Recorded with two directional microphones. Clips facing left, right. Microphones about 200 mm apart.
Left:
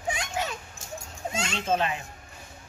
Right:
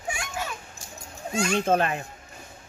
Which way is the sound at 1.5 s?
55° right (ahead or behind).